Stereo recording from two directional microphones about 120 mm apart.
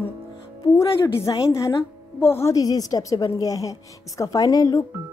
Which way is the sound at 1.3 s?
40° left (ahead or behind).